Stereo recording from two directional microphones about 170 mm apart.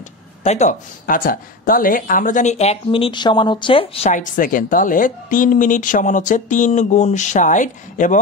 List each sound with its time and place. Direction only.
0.4 s speech: 40° left (ahead or behind)